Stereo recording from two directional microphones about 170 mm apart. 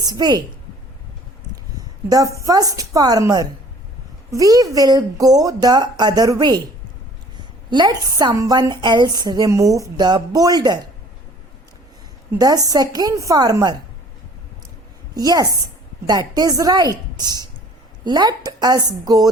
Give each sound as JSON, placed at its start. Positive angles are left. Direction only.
{"t": 0.0, "sound": "a woman's voice", "side_deg": -25}
{"t": 1.7, "sound": "a woman's voice", "side_deg": -20}
{"t": 7.7, "sound": "a woman's voice", "side_deg": -25}
{"t": 12.4, "sound": "a woman's voice", "side_deg": -20}
{"t": 15.1, "sound": "a woman's voice", "side_deg": -20}